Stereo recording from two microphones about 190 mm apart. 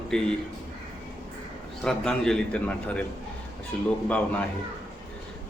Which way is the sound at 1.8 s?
5° left (ahead or behind).